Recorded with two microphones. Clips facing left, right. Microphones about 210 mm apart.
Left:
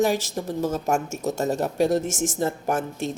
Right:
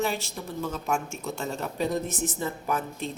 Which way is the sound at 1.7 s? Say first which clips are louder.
Left 5 dB; 85° left.